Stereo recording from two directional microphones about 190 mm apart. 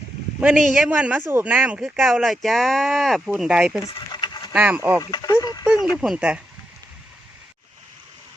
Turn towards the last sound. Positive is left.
turn(degrees=-5)  # may be behind; listen again after turning